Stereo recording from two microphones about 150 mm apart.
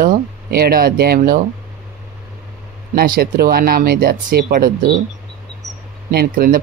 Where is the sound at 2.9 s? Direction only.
85° right.